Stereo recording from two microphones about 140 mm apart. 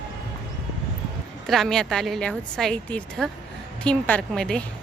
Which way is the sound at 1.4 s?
Centre (ahead or behind).